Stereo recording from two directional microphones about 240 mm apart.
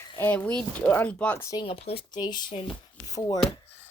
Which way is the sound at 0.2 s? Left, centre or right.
Centre.